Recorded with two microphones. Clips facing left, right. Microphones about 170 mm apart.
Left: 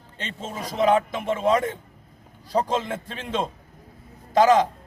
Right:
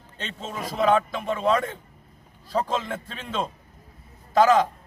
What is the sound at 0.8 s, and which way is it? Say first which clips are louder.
Speech: left 1 dB; 25° left (ahead or behind).